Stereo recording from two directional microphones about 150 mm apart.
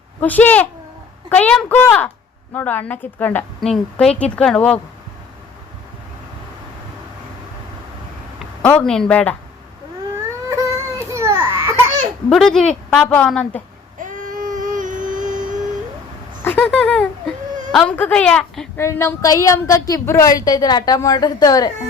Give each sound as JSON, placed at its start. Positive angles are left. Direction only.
{"t": 0.2, "sound": "a woman's voice", "side_deg": 10}
{"t": 8.6, "sound": "a woman's voice", "side_deg": 5}
{"t": 10.5, "sound": "baby cry", "side_deg": -20}
{"t": 12.3, "sound": "a woman's voice", "side_deg": 5}
{"t": 14.0, "sound": "a sound", "side_deg": -60}
{"t": 16.4, "sound": "speech", "side_deg": 10}
{"t": 18.8, "sound": "a woman's voice", "side_deg": 20}